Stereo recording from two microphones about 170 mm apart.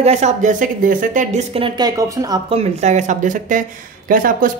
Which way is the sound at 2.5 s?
40° right (ahead or behind).